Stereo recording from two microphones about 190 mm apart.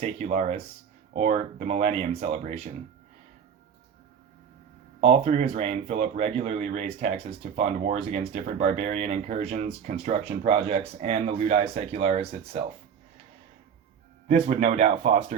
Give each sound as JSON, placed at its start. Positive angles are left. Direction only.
{"t": 0.0, "sound": "speech", "side_deg": -35}
{"t": 4.9, "sound": "speech", "side_deg": -35}
{"t": 14.3, "sound": "speech", "side_deg": -35}